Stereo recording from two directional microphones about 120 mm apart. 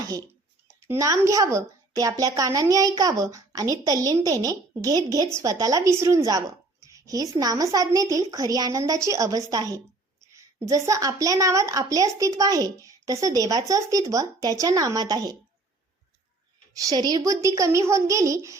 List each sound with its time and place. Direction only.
0.9 s a child's voice: 25° right (ahead or behind)
16.7 s a child's voice: 30° right (ahead or behind)